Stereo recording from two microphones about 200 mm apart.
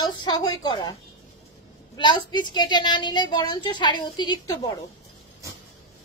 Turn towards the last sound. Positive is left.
turn(degrees=20)  # may be behind; listen again after turning